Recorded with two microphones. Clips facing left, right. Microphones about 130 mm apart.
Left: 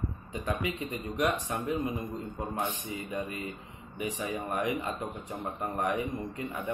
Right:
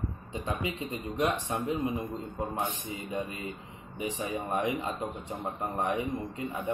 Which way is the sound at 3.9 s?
30° right (ahead or behind).